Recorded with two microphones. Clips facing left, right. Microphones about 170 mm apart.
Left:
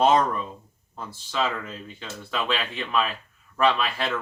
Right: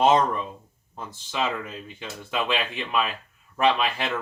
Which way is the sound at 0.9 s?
20° right (ahead or behind).